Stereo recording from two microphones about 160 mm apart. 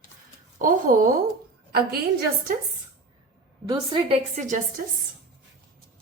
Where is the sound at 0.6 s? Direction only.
60° right (ahead or behind).